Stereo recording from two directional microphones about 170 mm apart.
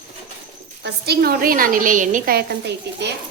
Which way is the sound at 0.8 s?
70° right (ahead or behind).